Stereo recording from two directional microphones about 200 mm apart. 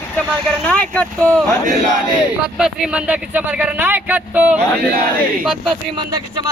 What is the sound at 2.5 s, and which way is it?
Speech, 5° right (ahead or behind).